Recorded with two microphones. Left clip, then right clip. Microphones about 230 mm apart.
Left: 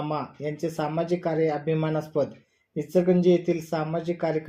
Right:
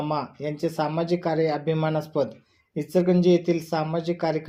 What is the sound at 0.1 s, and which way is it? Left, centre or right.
Speech, centre.